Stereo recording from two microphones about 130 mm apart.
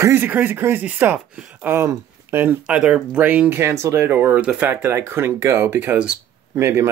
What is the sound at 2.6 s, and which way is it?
Speech, 10° right (ahead or behind).